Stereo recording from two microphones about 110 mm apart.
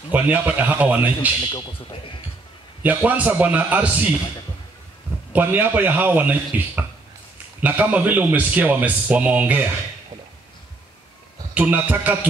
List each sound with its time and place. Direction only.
0.1 s speech: 15° right (ahead or behind)
1.4 s speech: 55° left (ahead or behind)
2.8 s speech: 15° right (ahead or behind)
5.3 s speech: 15° right (ahead or behind)
11.5 s speech: 15° right (ahead or behind)